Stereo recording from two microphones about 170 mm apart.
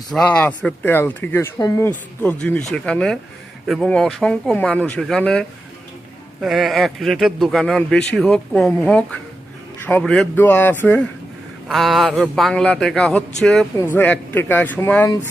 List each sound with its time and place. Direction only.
0.1 s speech: 5° left (ahead or behind)
11.7 s speech: centre (ahead or behind)